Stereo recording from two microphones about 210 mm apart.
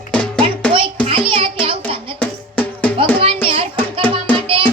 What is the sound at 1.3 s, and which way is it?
Music, 25° right (ahead or behind).